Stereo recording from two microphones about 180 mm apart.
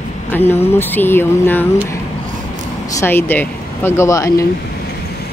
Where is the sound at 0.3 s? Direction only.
10° left (ahead or behind).